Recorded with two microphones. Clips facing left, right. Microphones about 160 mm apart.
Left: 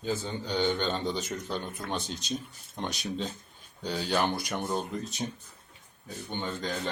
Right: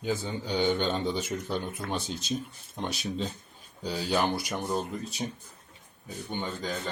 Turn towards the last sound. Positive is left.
turn(degrees=-5)  # may be behind; listen again after turning